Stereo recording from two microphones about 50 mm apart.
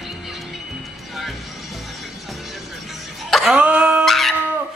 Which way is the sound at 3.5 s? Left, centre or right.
Right.